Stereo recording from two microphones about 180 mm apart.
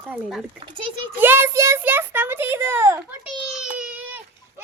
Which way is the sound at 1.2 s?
10° right (ahead or behind).